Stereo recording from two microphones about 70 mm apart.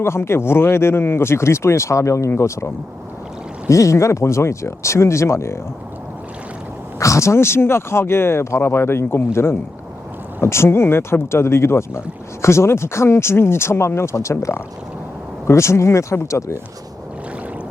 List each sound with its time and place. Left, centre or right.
0.0 s speech: left
3.7 s speech: left
7.0 s speech: left